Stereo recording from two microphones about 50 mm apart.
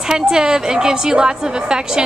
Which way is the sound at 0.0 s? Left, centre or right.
Centre.